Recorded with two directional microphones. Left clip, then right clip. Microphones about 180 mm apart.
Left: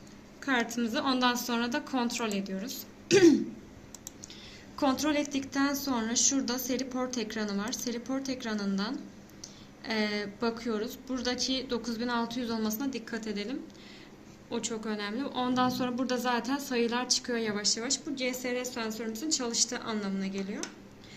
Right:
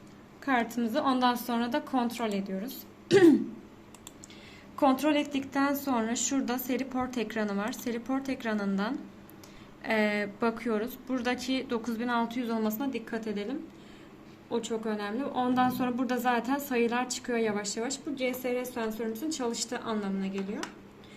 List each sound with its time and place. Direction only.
0.4 s a woman's voice: 35° right (ahead or behind)
4.8 s a woman's voice: 40° right (ahead or behind)